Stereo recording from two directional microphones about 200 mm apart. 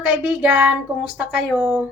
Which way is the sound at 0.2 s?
5° right (ahead or behind).